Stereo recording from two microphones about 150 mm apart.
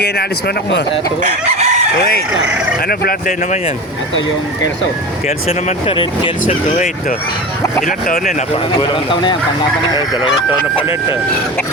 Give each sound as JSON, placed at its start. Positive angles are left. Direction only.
{"t": 0.0, "sound": "speech", "side_deg": 90}
{"t": 1.2, "sound": "chicken", "side_deg": -45}
{"t": 2.8, "sound": "speech", "side_deg": 90}
{"t": 5.5, "sound": "speech", "side_deg": 40}
{"t": 7.9, "sound": "speech", "side_deg": 65}
{"t": 8.5, "sound": "speech", "side_deg": 35}